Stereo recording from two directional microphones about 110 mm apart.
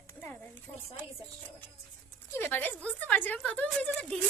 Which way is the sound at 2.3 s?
20° left (ahead or behind).